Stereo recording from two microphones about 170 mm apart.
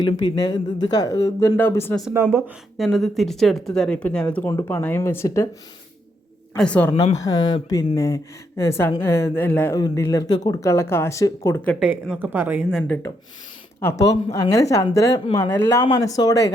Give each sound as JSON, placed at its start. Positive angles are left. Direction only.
{"t": 0.0, "sound": "speech", "side_deg": 25}
{"t": 2.1, "sound": "a woman's voice", "side_deg": -15}
{"t": 2.7, "sound": "speech", "side_deg": 0}
{"t": 6.6, "sound": "speech", "side_deg": 10}
{"t": 7.2, "sound": "speech", "side_deg": 20}
{"t": 11.8, "sound": "a woman's voice", "side_deg": -5}
{"t": 14.0, "sound": "speech", "side_deg": 20}
{"t": 15.8, "sound": "speech", "side_deg": 25}